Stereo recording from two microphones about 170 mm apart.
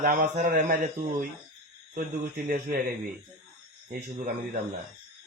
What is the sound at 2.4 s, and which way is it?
Speech, 55° right (ahead or behind).